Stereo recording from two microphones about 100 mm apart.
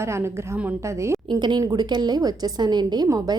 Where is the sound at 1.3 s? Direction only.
45° right (ahead or behind).